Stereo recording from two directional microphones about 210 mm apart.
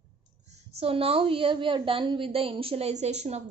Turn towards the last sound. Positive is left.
turn(degrees=-30)  # may be behind; listen again after turning